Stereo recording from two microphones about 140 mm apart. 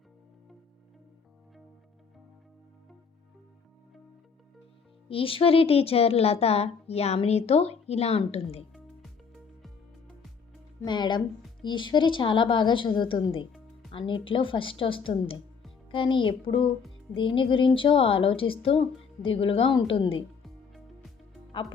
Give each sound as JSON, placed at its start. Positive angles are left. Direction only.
{"t": 5.0, "sound": "a woman's voice", "side_deg": 40}
{"t": 10.8, "sound": "a woman's voice", "side_deg": 35}
{"t": 20.4, "sound": "music", "side_deg": 0}